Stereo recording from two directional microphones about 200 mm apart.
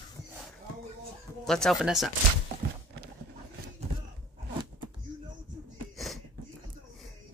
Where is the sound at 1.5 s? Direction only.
Centre (ahead or behind).